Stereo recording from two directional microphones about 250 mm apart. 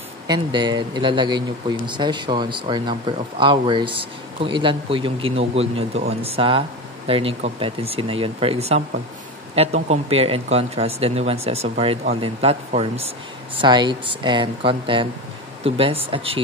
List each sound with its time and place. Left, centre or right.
0.3 s speech: centre